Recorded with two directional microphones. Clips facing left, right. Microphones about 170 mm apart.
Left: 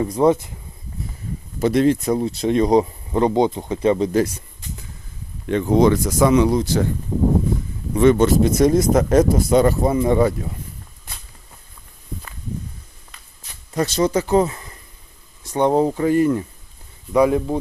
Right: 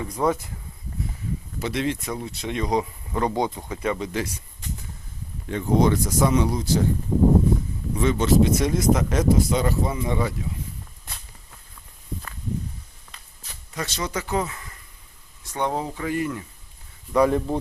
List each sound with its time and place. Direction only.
0.2 s speech: 25° left (ahead or behind)
1.5 s speech: 45° left (ahead or behind)
5.5 s speech: 85° left
7.9 s speech: 60° left (ahead or behind)
8.4 s speech: 45° left (ahead or behind)
13.7 s speech: 35° left (ahead or behind)
17.1 s speech: 10° left (ahead or behind)